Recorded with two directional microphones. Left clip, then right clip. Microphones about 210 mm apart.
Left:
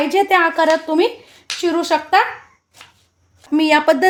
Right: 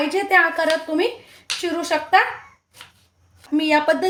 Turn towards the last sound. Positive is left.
turn(degrees=50)  # may be behind; listen again after turning